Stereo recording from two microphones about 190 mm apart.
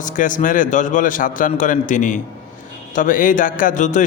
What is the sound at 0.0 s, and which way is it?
A man's voice, 45° left (ahead or behind).